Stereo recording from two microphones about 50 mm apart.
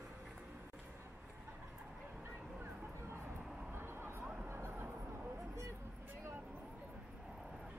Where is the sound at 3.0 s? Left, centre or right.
Right.